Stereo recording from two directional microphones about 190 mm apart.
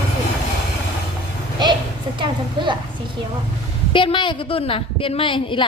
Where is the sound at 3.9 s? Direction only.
25° left (ahead or behind).